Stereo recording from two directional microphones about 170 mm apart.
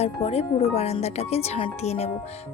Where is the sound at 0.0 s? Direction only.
35° left (ahead or behind).